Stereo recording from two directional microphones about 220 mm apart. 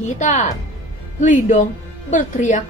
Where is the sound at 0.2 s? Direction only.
35° left (ahead or behind).